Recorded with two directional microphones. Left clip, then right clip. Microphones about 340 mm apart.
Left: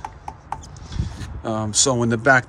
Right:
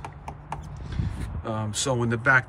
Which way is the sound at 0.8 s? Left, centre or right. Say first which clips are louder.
Left 2 dB; centre.